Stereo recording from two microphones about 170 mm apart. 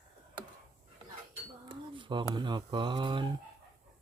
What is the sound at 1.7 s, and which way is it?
Speech, 30° right (ahead or behind).